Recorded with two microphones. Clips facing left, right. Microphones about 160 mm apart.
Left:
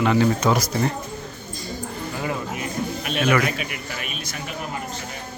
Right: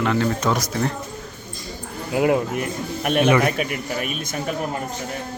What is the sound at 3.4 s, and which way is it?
A man's voice, 45° right (ahead or behind).